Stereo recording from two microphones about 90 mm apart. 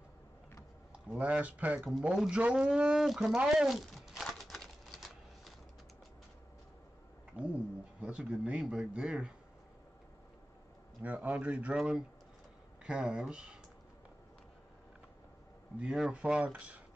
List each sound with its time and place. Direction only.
0.9 s speech: 15° right (ahead or behind)
4.2 s typewriter: 5° left (ahead or behind)
7.3 s speech: 15° right (ahead or behind)
11.0 s speech: 15° right (ahead or behind)
11.7 s speech: 5° right (ahead or behind)
15.8 s speech: 5° right (ahead or behind)